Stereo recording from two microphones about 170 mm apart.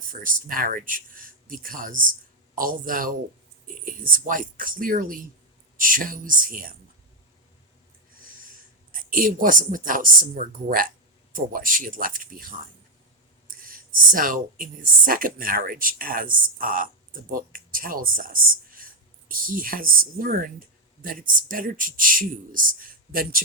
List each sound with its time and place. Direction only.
0.1 s speech: 55° right (ahead or behind)
8.2 s speech: 55° right (ahead or behind)